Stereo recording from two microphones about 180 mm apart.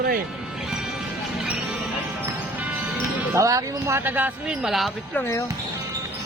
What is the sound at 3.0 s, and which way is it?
Speech, 20° right (ahead or behind).